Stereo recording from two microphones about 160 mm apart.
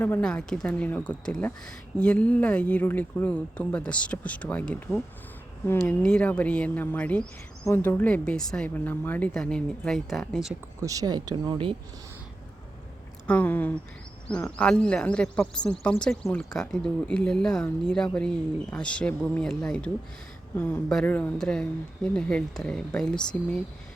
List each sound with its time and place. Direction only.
0.0 s a woman's voice: 10° left (ahead or behind)
10.8 s speech: 20° right (ahead or behind)
13.2 s a woman's voice: 10° left (ahead or behind)